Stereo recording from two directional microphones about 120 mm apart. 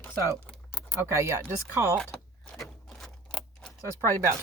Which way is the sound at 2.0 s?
10° left (ahead or behind).